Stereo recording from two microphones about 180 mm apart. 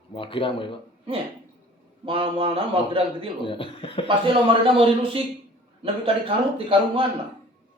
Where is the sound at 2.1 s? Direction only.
30° right (ahead or behind).